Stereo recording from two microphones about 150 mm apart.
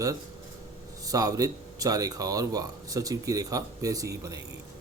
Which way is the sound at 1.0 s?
25° right (ahead or behind).